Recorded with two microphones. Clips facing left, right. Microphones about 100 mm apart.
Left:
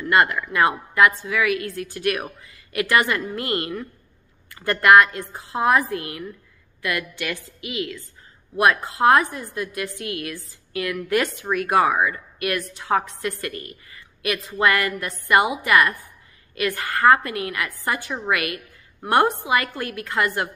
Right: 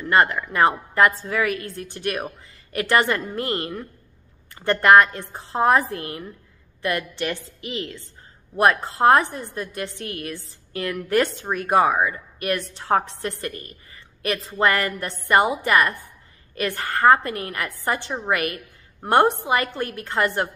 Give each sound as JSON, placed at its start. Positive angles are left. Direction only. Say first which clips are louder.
{"t": 0.1, "sound": "a woman's voice", "louder": "even", "side_deg": -30}
{"t": 1.7, "sound": "a woman's voice", "louder": "left 3 dB", "side_deg": -25}
{"t": 12.0, "sound": "a woman's voice", "louder": "left 1 dB", "side_deg": -30}